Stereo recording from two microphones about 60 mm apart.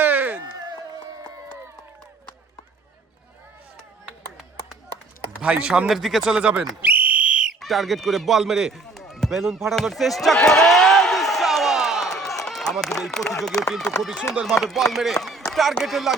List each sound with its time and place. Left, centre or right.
0.0 s a sound: right
5.4 s speech: centre
5.9 s speech: centre
6.3 s speech: centre
6.8 s whistle: right
7.6 s speech: centre
8.7 s a sound: centre
14.4 s speech: centre
15.1 s a sound: centre
15.5 s speech: centre